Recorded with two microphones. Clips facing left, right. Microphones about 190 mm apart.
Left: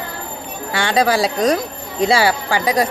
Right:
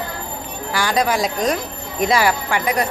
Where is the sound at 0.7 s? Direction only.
25° left (ahead or behind).